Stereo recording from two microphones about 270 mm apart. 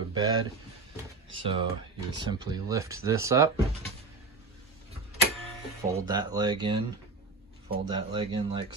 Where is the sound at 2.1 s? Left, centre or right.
Centre.